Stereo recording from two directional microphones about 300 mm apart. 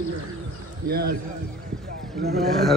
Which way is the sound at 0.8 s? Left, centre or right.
Right.